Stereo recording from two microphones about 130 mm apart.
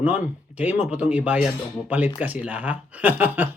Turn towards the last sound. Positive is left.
turn(degrees=-15)  # may be behind; listen again after turning